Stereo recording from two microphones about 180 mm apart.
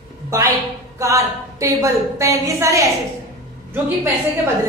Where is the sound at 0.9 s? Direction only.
15° right (ahead or behind).